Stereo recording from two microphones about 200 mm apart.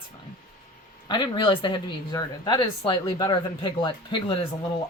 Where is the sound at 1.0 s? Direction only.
20° left (ahead or behind).